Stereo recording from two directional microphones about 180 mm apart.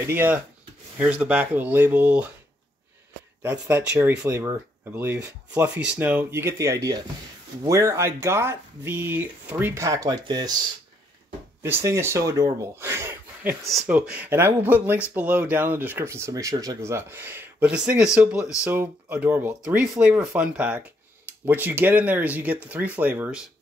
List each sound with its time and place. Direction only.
0.0 s speech: 10° right (ahead or behind)
3.4 s speech: 10° right (ahead or behind)
11.6 s speech: 15° right (ahead or behind)